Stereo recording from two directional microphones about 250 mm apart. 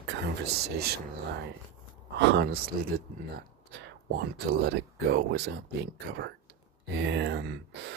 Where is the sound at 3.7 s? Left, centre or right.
Right.